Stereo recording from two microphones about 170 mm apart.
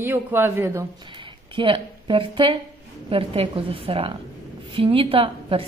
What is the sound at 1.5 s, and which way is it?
A woman's voice, 30° right (ahead or behind).